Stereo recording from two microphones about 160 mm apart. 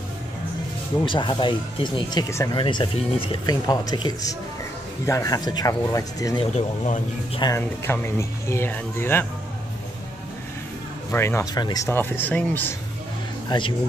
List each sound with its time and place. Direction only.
1.0 s speech: 30° left (ahead or behind)
2.5 s speech: 30° left (ahead or behind)
7.8 s speech: 15° left (ahead or behind)
11.1 s speech: 15° left (ahead or behind)
13.5 s speech: 30° left (ahead or behind)